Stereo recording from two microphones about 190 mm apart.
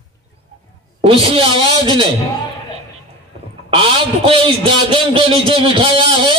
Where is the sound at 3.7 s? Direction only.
30° right (ahead or behind).